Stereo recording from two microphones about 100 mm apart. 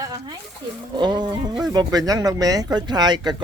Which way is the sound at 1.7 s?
40° right (ahead or behind).